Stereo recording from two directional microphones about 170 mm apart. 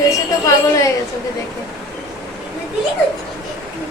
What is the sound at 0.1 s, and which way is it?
Speech, 20° left (ahead or behind).